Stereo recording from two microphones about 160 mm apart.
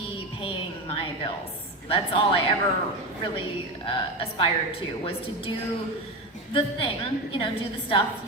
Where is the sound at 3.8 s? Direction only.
35° left (ahead or behind).